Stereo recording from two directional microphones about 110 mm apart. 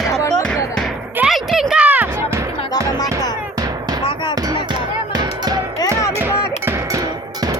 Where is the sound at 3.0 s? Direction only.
35° left (ahead or behind).